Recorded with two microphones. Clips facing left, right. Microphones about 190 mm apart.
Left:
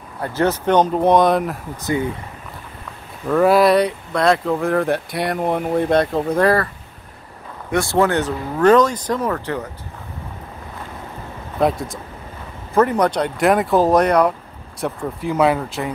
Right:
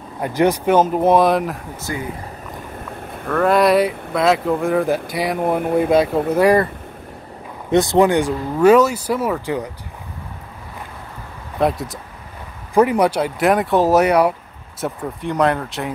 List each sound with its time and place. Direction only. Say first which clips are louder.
0.2 s speech: right 2 dB; 15° right (ahead or behind)
1.8 s speech: left 8 dB; 25° left (ahead or behind)
3.3 s speech: left 1 dB; 5° left (ahead or behind); by 6.7 s 15° right (ahead or behind)
7.7 s speech: right 3 dB; 20° right (ahead or behind)
11.6 s speech: even; centre (ahead or behind)
14.8 s speech: left 1 dB; 5° left (ahead or behind)